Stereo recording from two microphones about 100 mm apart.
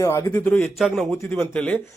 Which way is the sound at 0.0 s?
35° left (ahead or behind).